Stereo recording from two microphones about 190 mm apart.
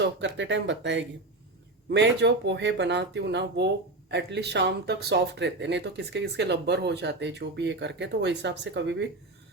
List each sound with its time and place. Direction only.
0.0 s speech: 70° right (ahead or behind)